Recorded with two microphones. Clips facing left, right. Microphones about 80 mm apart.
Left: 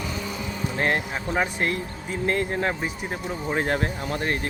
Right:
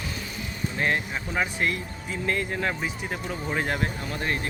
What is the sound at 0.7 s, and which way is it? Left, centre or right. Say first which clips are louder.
Speech: left 2 dB; left.